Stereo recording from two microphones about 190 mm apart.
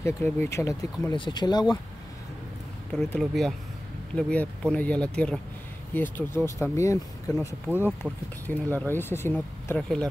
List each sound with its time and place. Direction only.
0.0 s speech: 15° left (ahead or behind)
3.0 s speech: 5° left (ahead or behind)